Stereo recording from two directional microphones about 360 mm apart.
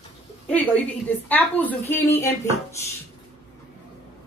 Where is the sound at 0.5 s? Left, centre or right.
Centre.